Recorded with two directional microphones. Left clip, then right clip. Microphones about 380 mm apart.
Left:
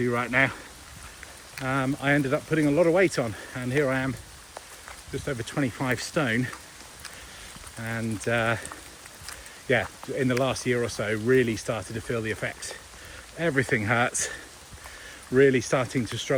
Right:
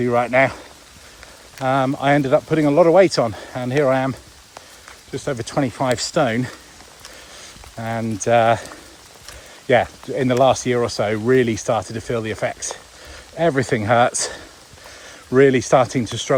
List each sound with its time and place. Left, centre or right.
0.0 s speech: centre
1.6 s speech: centre
5.1 s speech: centre
7.8 s speech: centre
9.6 s speech: centre
15.4 s speech: centre